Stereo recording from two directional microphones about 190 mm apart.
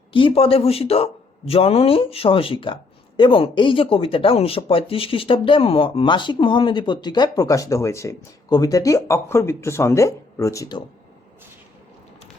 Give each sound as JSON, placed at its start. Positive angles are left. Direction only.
{"t": 0.1, "sound": "speech", "side_deg": 30}